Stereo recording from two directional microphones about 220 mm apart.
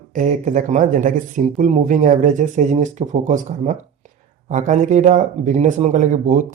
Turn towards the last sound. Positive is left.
turn(degrees=-35)  # may be behind; listen again after turning